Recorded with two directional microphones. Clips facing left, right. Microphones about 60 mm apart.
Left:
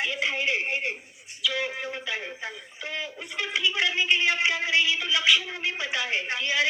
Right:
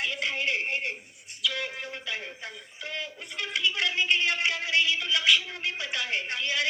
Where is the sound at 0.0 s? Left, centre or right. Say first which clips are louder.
Left 2 dB; centre.